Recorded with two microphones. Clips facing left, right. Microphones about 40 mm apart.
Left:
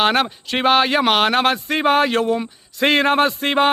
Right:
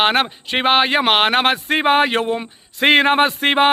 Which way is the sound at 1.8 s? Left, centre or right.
Right.